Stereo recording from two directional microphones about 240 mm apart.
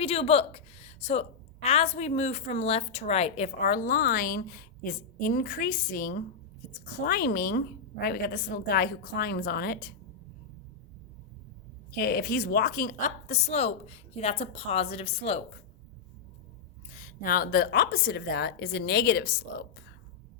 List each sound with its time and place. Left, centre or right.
0.0 s a woman's voice: left
11.9 s a woman's voice: left
16.9 s a woman's voice: left